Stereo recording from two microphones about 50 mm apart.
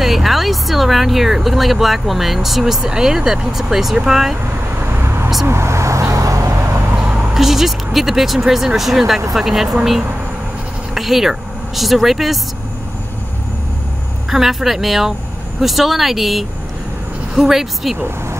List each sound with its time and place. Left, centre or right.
0.0 s speech: centre
4.9 s vehicle: right
5.5 s vehicle: right
7.3 s speech: centre
11.0 s speech: centre
14.3 s speech: centre